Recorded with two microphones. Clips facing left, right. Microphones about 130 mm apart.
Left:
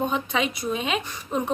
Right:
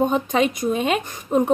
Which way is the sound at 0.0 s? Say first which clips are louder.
Right 6 dB; 45° right (ahead or behind).